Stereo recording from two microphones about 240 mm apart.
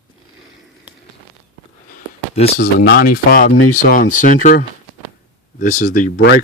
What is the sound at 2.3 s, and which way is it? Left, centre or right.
Speech, left.